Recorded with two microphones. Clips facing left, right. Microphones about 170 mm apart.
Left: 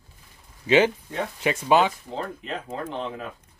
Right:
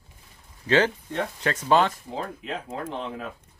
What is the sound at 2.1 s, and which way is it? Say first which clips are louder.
Speech: left 1 dB; 5° right (ahead or behind).